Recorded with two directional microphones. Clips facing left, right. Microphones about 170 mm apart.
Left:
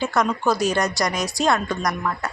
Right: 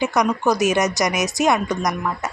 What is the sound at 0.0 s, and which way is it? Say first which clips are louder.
A woman's voice: right 2 dB; 20° right (ahead or behind).